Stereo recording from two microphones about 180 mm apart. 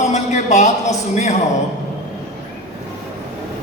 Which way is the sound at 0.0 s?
40° left (ahead or behind).